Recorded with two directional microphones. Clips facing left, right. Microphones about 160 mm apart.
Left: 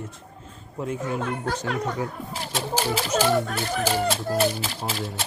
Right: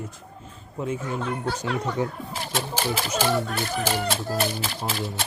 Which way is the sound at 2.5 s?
55° right (ahead or behind).